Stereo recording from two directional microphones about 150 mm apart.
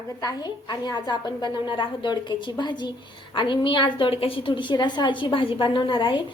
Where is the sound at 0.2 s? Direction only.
25° left (ahead or behind).